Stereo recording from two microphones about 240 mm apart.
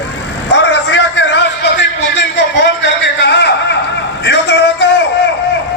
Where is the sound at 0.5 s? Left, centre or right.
Left.